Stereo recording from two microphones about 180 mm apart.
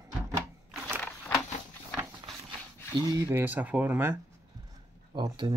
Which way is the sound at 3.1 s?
15° right (ahead or behind).